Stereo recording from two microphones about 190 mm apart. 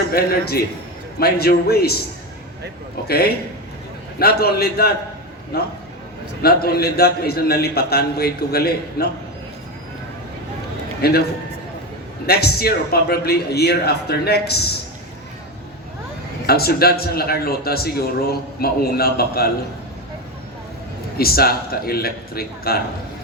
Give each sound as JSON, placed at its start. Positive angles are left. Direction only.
{"t": 0.1, "sound": "a man's voice", "side_deg": 55}
{"t": 3.1, "sound": "a man's voice", "side_deg": 55}
{"t": 11.0, "sound": "a man's voice", "side_deg": 55}
{"t": 12.2, "sound": "a man's voice", "side_deg": 55}
{"t": 16.5, "sound": "speech", "side_deg": 55}
{"t": 21.2, "sound": "speech", "side_deg": 55}